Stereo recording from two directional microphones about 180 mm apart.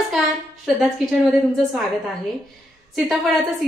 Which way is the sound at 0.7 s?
5° right (ahead or behind).